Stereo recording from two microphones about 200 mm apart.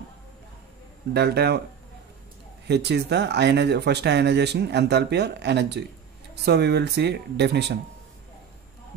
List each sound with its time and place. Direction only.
1.1 s speech: 55° right (ahead or behind)
2.7 s speech: 55° right (ahead or behind)